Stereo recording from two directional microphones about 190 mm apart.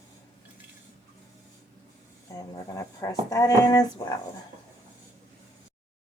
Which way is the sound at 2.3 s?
15° left (ahead or behind).